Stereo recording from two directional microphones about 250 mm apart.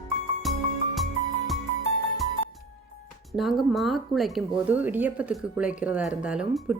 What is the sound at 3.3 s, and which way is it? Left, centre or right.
Speech, centre.